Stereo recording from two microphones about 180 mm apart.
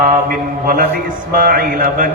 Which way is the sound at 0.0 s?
50° right (ahead or behind).